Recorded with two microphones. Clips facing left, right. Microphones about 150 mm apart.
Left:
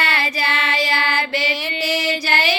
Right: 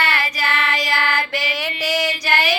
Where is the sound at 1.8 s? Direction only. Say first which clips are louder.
Right 1 dB; 15° right (ahead or behind).